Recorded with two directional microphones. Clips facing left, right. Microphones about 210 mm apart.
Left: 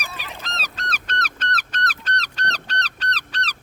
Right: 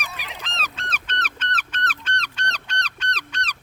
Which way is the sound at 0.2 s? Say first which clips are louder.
Left 1 dB; 15° right (ahead or behind).